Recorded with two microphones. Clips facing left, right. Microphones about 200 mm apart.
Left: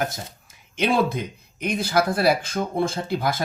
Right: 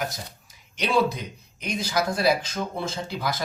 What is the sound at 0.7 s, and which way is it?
Speech, 50° left (ahead or behind).